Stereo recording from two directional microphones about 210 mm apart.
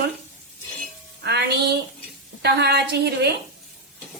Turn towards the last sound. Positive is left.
turn(degrees=-50)  # may be behind; listen again after turning